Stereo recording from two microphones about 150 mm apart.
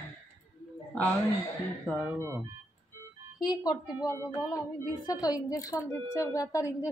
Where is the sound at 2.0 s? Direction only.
15° right (ahead or behind).